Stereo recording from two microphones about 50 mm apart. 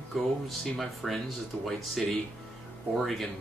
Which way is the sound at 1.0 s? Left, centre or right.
Centre.